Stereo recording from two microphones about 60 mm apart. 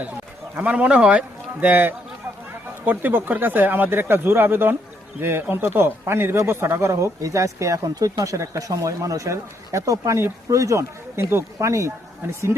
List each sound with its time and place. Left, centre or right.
0.5 s speech: right
1.6 s speech: right
6.9 s speech: right